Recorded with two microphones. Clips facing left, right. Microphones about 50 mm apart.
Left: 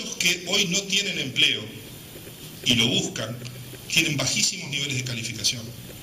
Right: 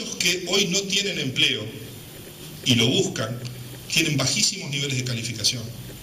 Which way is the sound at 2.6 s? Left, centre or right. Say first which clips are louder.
Right 2 dB; left.